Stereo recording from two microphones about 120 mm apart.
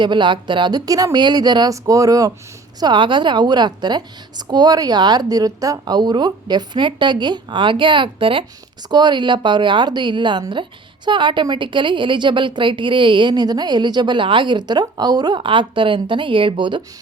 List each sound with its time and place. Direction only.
0.0 s a woman's voice: 40° right (ahead or behind)
2.8 s a woman's voice: 40° right (ahead or behind)